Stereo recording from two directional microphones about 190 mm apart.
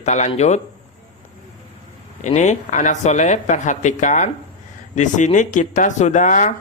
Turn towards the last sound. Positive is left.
turn(degrees=40)  # may be behind; listen again after turning